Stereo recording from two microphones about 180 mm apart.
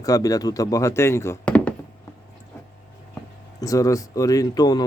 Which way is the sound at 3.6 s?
20° left (ahead or behind).